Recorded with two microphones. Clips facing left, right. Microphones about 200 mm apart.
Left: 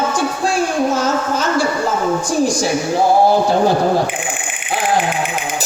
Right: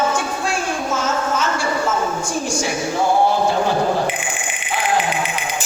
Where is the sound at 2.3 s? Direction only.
35° left (ahead or behind).